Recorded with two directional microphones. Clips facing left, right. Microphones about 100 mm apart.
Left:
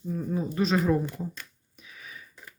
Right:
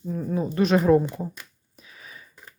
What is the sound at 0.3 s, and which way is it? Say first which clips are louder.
Speech: right 5 dB; 65° right (ahead or behind).